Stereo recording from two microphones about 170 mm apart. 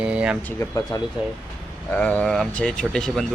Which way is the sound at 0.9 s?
25° left (ahead or behind).